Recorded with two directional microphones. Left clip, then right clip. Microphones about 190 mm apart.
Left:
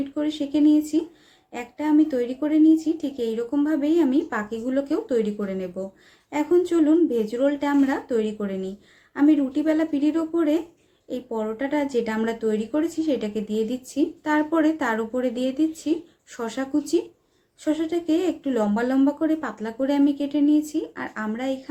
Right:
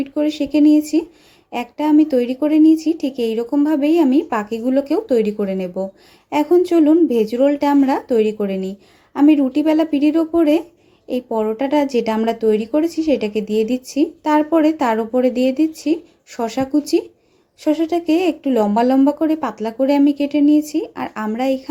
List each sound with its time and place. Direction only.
0.1 s speech: 30° right (ahead or behind)